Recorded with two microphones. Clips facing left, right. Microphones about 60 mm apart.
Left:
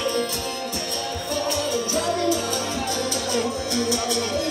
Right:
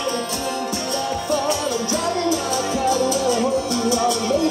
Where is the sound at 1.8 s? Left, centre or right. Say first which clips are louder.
Right 2 dB; right.